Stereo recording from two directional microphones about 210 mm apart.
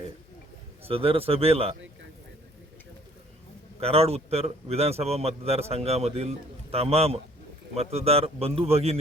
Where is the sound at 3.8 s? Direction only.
30° right (ahead or behind).